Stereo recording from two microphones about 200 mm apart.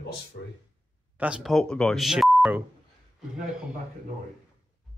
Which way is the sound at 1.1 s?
5° right (ahead or behind).